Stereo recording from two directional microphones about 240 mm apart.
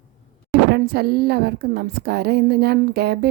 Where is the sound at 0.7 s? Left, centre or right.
Right.